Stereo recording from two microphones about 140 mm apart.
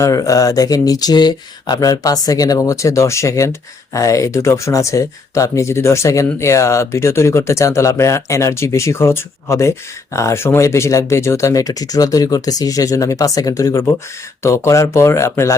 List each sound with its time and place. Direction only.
0.0 s speech: 25° left (ahead or behind)